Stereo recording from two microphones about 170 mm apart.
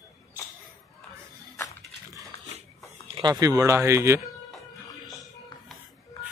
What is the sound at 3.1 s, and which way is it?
Speech, 25° right (ahead or behind).